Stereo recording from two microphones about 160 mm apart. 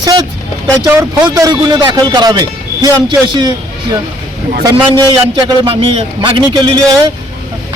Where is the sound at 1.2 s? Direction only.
25° right (ahead or behind).